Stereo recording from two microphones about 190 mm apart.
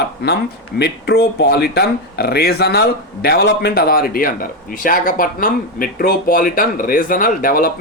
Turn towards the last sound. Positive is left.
turn(degrees=50)  # may be behind; listen again after turning